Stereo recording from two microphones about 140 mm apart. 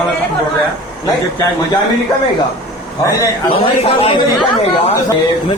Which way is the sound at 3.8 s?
40° left (ahead or behind).